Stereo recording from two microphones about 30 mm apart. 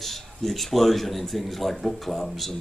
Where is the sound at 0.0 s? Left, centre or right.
Centre.